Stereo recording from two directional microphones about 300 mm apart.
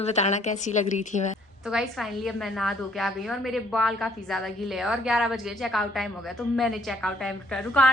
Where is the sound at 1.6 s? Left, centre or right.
Centre.